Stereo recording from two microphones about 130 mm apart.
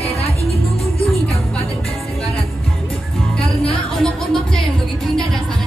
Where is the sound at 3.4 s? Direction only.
5° left (ahead or behind).